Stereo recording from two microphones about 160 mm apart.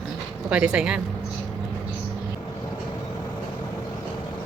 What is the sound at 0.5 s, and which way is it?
Speech, 5° right (ahead or behind).